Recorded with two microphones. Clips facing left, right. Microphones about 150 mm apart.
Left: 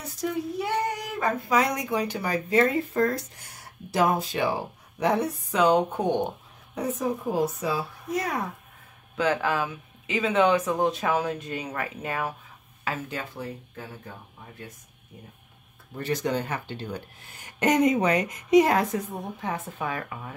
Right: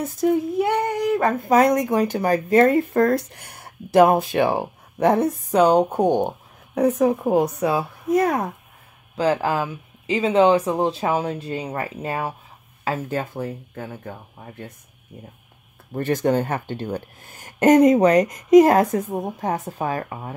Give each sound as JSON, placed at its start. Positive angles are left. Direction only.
{"t": 0.0, "sound": "speech", "side_deg": -50}
{"t": 6.7, "sound": "speech", "side_deg": -65}
{"t": 9.1, "sound": "speech", "side_deg": -35}
{"t": 12.8, "sound": "speech", "side_deg": -40}
{"t": 15.9, "sound": "speech", "side_deg": -50}